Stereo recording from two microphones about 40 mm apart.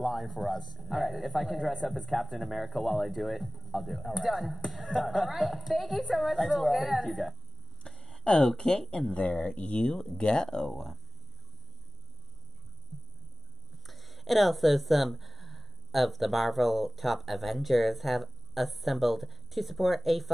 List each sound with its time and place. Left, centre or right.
0.0 s speech: centre
7.9 s a sound: centre
8.5 s speech: centre
9.3 s speech: left; by 11.0 s centre
13.8 s speech: centre